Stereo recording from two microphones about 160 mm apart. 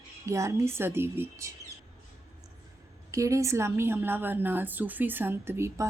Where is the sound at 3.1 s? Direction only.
20° right (ahead or behind).